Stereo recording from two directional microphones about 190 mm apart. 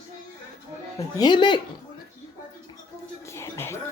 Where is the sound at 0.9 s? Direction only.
20° left (ahead or behind).